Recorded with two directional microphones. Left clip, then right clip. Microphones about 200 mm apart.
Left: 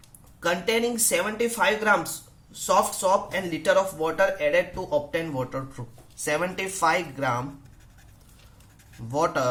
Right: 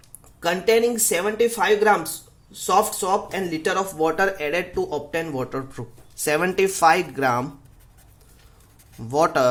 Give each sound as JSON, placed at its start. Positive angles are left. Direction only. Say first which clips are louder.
{"t": 0.3, "sound": "speech", "louder": "right 5 dB", "side_deg": -35}
{"t": 9.0, "sound": "speech", "louder": "right 6 dB", "side_deg": -45}